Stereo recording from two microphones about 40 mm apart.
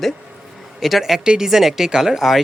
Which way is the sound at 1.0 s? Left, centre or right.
Centre.